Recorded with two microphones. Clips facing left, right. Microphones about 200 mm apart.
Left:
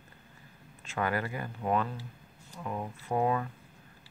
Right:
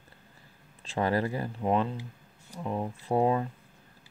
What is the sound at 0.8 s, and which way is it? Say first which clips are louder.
Speech: right 4 dB; 35° right (ahead or behind).